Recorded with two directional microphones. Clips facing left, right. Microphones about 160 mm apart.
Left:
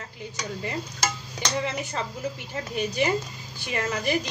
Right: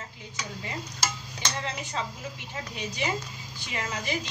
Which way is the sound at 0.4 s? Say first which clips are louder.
Left 5 dB; 50° left (ahead or behind).